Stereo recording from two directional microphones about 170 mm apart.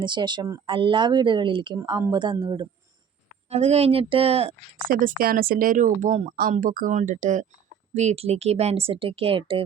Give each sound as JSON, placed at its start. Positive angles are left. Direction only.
{"t": 0.0, "sound": "speech", "side_deg": -25}
{"t": 3.5, "sound": "speech", "side_deg": -40}
{"t": 4.8, "sound": "speech", "side_deg": -55}
{"t": 6.3, "sound": "speech", "side_deg": -55}